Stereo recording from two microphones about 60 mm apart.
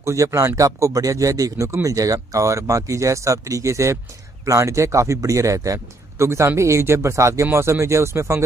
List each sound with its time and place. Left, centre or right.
0.0 s speech: right